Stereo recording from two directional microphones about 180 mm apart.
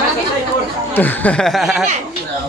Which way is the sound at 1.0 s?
10° left (ahead or behind).